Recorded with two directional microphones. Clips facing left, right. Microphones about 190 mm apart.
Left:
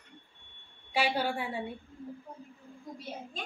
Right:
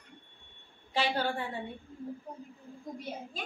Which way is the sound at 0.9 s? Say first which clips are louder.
Left 1 dB; 10° left (ahead or behind).